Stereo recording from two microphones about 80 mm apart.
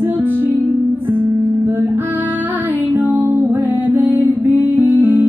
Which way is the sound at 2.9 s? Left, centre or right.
Right.